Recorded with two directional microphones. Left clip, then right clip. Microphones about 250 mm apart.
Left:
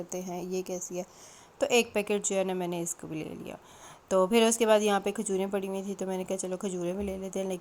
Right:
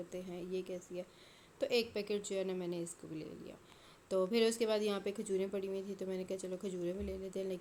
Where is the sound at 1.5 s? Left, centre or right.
Left.